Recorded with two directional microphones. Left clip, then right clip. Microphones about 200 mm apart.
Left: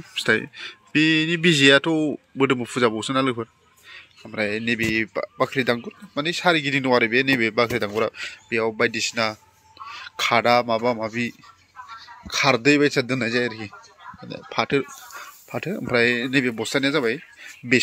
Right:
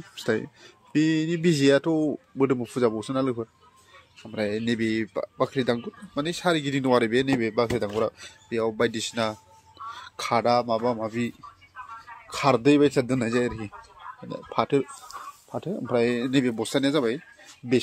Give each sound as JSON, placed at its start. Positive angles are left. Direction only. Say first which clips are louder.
{"t": 0.1, "sound": "speech", "louder": "left 6 dB", "side_deg": 0}